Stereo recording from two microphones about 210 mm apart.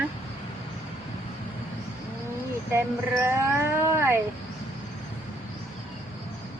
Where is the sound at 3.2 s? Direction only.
10° right (ahead or behind).